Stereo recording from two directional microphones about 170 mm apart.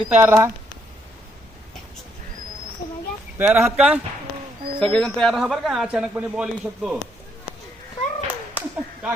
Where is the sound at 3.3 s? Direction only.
10° right (ahead or behind).